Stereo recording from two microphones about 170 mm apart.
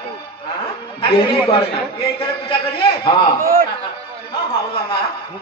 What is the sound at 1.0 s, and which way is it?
A man's voice, 30° left (ahead or behind).